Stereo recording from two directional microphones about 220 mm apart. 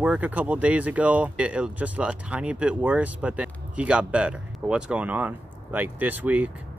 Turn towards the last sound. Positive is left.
turn(degrees=-5)  # may be behind; listen again after turning